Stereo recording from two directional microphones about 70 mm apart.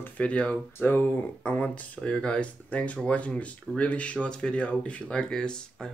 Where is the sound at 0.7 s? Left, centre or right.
Left.